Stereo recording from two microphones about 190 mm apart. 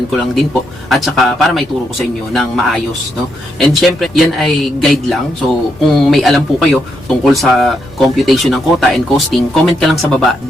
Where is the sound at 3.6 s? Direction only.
Centre (ahead or behind).